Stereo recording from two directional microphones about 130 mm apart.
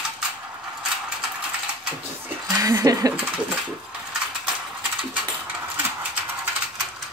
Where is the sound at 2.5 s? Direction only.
25° right (ahead or behind).